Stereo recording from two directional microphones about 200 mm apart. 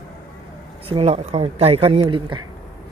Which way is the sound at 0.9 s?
30° right (ahead or behind).